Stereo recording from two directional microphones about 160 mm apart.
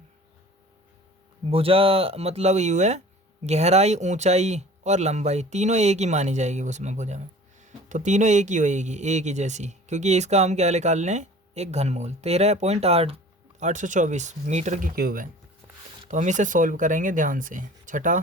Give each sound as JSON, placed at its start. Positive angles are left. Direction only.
{"t": 1.5, "sound": "speech", "side_deg": -35}
{"t": 16.0, "sound": "speech", "side_deg": -50}